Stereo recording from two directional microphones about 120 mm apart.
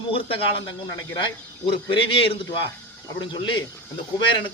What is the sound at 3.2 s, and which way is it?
Speech, 40° left (ahead or behind).